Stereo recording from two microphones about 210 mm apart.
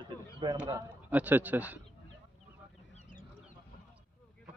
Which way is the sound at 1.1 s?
10° right (ahead or behind).